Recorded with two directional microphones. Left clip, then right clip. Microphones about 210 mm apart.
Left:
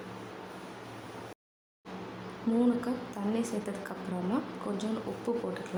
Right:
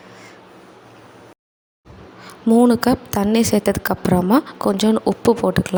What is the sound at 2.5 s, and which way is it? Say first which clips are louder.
A woman's voice: right 16 dB; 35° right (ahead or behind).